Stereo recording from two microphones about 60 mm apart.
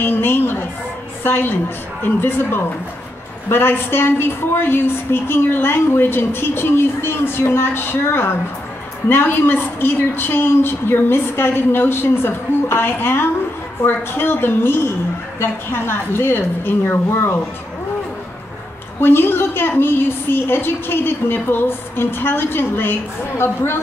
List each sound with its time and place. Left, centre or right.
0.0 s a woman's voice: left
18.9 s a woman's voice: left